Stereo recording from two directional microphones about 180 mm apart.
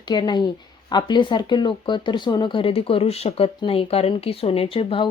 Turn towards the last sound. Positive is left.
turn(degrees=30)  # may be behind; listen again after turning